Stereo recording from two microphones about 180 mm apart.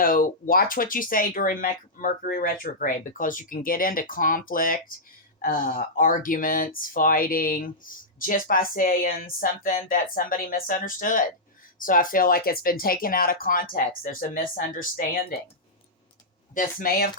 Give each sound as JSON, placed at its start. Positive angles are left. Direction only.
{"t": 0.0, "sound": "speech", "side_deg": 50}
{"t": 16.6, "sound": "speech", "side_deg": 55}